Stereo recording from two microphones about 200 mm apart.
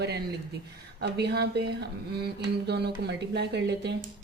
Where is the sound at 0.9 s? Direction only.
55° right (ahead or behind).